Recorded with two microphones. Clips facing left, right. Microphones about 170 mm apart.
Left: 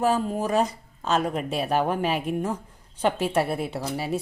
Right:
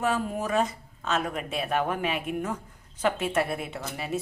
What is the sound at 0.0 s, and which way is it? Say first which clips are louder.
A woman's voice: left 4 dB; 30° left (ahead or behind).